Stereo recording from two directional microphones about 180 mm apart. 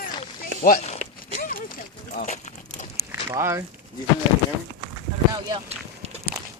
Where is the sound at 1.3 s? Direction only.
50° left (ahead or behind).